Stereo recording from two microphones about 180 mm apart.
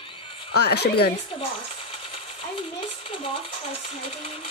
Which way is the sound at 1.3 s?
30° left (ahead or behind).